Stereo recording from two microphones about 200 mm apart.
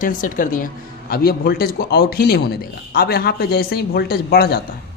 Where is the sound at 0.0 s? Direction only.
40° left (ahead or behind).